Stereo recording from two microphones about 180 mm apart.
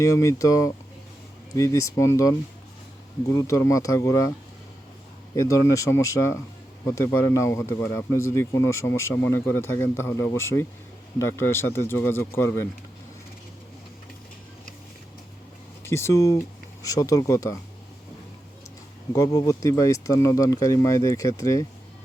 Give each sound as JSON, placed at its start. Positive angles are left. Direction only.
{"t": 0.0, "sound": "speech", "side_deg": 20}
{"t": 5.3, "sound": "speech", "side_deg": 15}
{"t": 15.8, "sound": "speech", "side_deg": 15}
{"t": 19.1, "sound": "speech", "side_deg": 20}